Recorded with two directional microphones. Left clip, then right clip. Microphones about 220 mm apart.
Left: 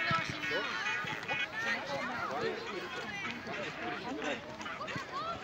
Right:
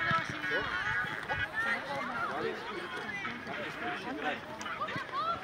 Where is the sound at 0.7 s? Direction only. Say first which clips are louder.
Right 2 dB; 45° left (ahead or behind).